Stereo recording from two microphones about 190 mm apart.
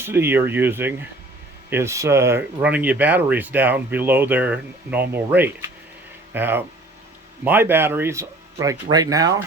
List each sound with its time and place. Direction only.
0.0 s speech: 10° right (ahead or behind)